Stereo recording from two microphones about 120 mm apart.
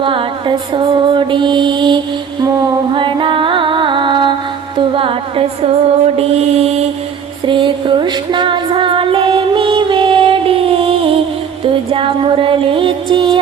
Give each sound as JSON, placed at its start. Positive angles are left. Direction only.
{"t": 0.0, "sound": "mantra", "side_deg": -45}
{"t": 2.4, "sound": "music", "side_deg": -35}
{"t": 4.8, "sound": "a sound", "side_deg": -50}
{"t": 6.1, "sound": "mantra", "side_deg": -55}
{"t": 7.4, "sound": "music", "side_deg": -45}